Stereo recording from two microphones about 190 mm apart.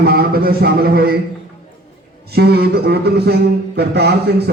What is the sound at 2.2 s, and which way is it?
Speech, 55° right (ahead or behind).